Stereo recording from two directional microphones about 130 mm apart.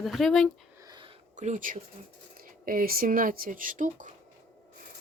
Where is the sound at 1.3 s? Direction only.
70° right (ahead or behind).